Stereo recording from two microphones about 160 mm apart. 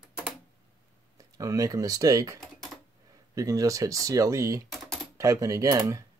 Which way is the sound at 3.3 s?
20° right (ahead or behind).